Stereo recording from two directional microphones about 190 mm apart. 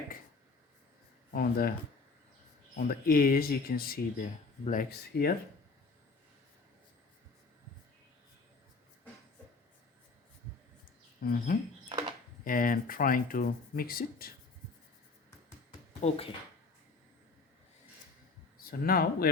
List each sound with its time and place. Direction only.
1.3 s speech: 50° left (ahead or behind)
2.7 s speech: 50° left (ahead or behind)
11.2 s speech: 50° left (ahead or behind)
16.0 s speech: 30° left (ahead or behind)
18.7 s speech: 50° left (ahead or behind)